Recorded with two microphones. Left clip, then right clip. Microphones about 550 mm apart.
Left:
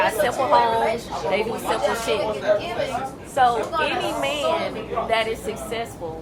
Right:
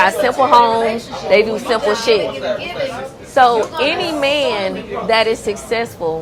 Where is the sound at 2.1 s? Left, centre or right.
Right.